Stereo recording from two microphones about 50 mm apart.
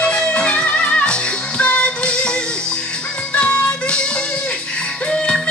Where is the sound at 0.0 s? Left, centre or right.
Left.